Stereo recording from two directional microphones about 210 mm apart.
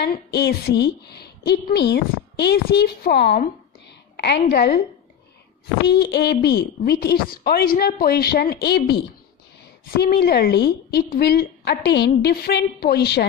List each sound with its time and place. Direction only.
0.0 s speech: 50° left (ahead or behind)
5.9 s speech: 50° left (ahead or behind)